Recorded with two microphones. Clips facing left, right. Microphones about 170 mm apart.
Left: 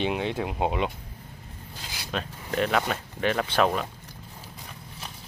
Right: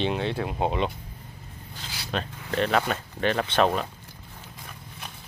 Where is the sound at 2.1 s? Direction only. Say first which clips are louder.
Right 1 dB; 5° left (ahead or behind).